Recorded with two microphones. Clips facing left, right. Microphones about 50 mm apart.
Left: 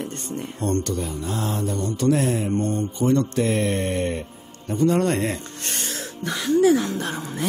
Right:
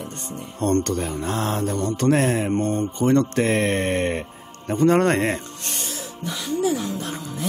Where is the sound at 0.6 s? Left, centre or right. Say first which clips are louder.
Right 4 dB; right.